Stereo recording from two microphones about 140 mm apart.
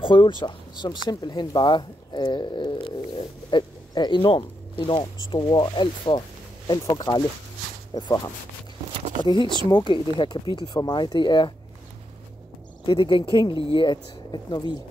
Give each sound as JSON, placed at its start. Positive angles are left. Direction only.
{"t": 0.0, "sound": "speech", "side_deg": 35}
{"t": 9.2, "sound": "speech", "side_deg": 35}
{"t": 12.8, "sound": "speech", "side_deg": 35}